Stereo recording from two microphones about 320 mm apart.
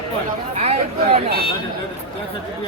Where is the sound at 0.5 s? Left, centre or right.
Centre.